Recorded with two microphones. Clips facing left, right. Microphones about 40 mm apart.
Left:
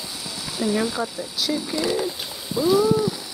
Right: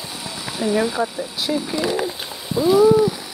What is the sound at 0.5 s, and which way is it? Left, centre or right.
Speech, right.